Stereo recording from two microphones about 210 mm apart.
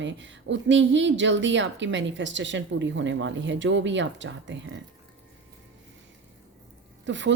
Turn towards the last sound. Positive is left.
turn(degrees=-60)  # may be behind; listen again after turning